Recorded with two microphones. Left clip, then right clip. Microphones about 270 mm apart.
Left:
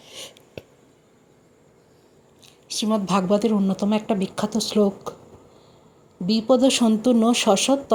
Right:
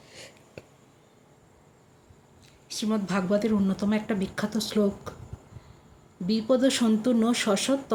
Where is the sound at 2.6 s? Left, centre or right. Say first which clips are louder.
Left 7 dB; centre.